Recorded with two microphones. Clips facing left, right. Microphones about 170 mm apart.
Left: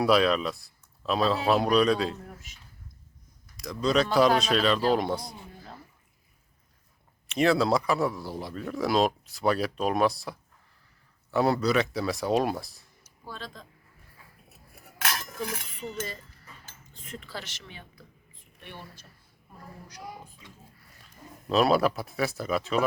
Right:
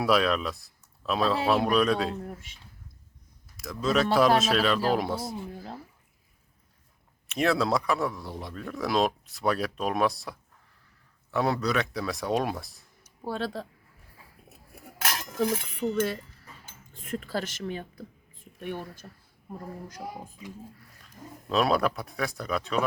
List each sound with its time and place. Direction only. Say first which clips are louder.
0.0 s a man's voice: left 2 dB; centre (ahead or behind)
3.6 s a man's voice: left 1 dB; centre (ahead or behind)
7.3 s a man's voice: left 2 dB; centre (ahead or behind)
13.2 s speech: right 10 dB; 70° right (ahead or behind)
15.8 s speech: right 10 dB; 70° right (ahead or behind)
16.9 s speech: right 8 dB; 50° right (ahead or behind)
21.5 s a man's voice: left 2 dB; centre (ahead or behind)